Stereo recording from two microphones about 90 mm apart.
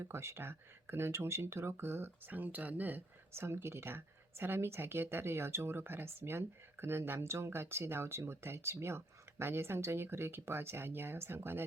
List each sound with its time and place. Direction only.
0.0 s speech: 30° right (ahead or behind)